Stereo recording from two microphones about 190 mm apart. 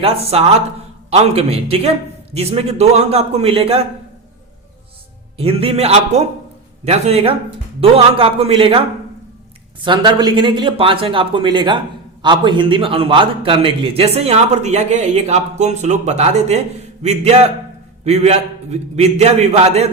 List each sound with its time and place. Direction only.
0.0 s a man's voice: 30° right (ahead or behind)
5.4 s a man's voice: 30° right (ahead or behind)
9.8 s a man's voice: 25° right (ahead or behind)